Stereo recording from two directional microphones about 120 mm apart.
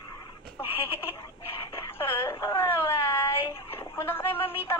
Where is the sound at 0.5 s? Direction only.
20° left (ahead or behind).